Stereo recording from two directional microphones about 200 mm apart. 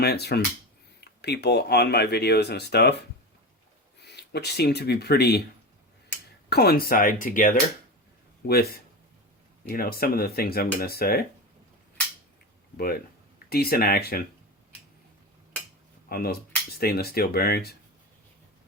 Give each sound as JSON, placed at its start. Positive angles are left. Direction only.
{"t": 0.0, "sound": "speech", "side_deg": 55}
{"t": 4.0, "sound": "speech", "side_deg": 55}
{"t": 6.5, "sound": "speech", "side_deg": 50}
{"t": 12.7, "sound": "speech", "side_deg": 50}
{"t": 16.0, "sound": "speech", "side_deg": 50}